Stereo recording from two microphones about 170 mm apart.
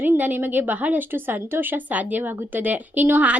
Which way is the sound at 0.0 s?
10° right (ahead or behind).